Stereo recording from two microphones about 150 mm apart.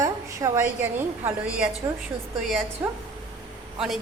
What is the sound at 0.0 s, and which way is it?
A woman's voice, 20° right (ahead or behind).